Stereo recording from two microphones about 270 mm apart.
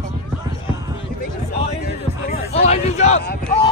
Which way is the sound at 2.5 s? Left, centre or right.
Left.